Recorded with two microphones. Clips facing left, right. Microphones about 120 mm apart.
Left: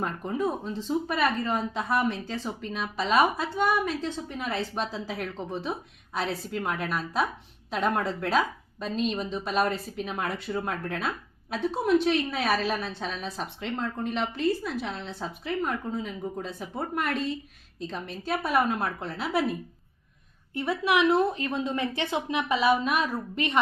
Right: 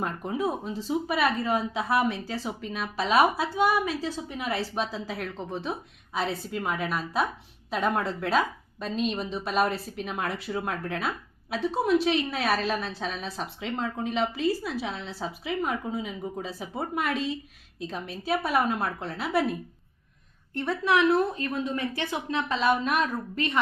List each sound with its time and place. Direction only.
0.0 s a woman's voice: centre (ahead or behind)
20.9 s a woman's voice: 20° left (ahead or behind)
23.3 s a woman's voice: 20° left (ahead or behind)